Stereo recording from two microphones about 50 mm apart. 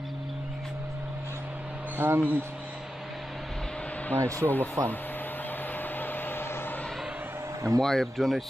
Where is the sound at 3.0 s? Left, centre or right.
Centre.